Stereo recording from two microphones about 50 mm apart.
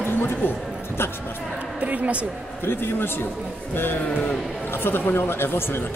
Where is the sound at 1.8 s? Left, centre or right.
Right.